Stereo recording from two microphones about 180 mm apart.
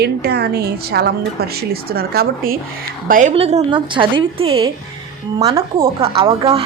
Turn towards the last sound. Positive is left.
turn(degrees=-30)  # may be behind; listen again after turning